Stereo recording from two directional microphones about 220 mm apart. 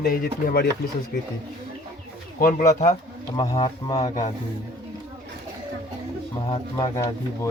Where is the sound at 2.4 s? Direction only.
40° left (ahead or behind).